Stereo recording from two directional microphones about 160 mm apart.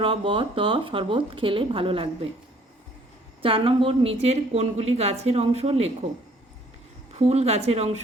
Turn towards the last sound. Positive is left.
turn(degrees=-40)  # may be behind; listen again after turning